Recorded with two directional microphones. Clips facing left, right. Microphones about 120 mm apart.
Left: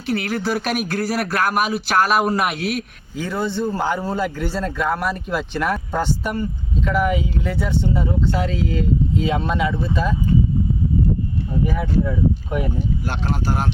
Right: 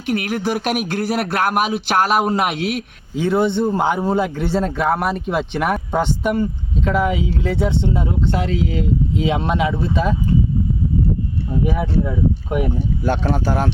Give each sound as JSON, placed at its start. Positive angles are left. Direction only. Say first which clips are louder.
{"t": 0.0, "sound": "speech", "louder": "right 2 dB", "side_deg": -15}
{"t": 11.6, "sound": "speech", "louder": "right 1 dB", "side_deg": -15}